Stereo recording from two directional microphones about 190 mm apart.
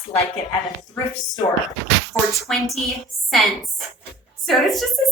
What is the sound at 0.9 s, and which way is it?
Speech, 20° left (ahead or behind).